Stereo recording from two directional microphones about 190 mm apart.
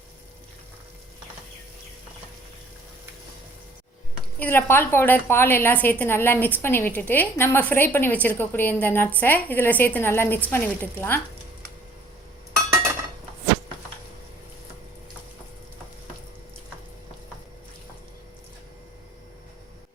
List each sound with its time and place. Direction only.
4.4 s a woman's voice: 10° left (ahead or behind)